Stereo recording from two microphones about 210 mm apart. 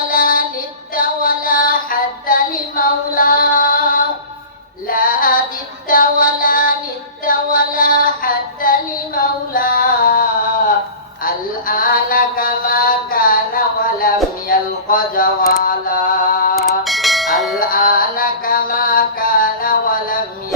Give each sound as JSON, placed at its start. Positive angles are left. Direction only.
{"t": 0.1, "sound": "music", "side_deg": 40}
{"t": 11.2, "sound": "mantra", "side_deg": 40}
{"t": 14.4, "sound": "a sound", "side_deg": 40}
{"t": 16.8, "sound": "bell", "side_deg": 0}
{"t": 17.6, "sound": "music", "side_deg": 40}